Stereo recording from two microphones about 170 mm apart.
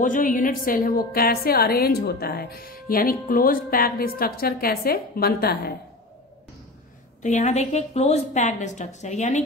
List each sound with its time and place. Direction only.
0.0 s a woman's voice: 50° left (ahead or behind)
7.2 s a woman's voice: 45° left (ahead or behind)